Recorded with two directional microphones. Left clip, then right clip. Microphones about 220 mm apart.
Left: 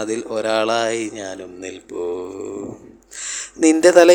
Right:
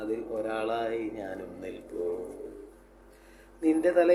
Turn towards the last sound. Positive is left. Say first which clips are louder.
# left 13 dB
turn(degrees=45)  # may be behind; listen again after turning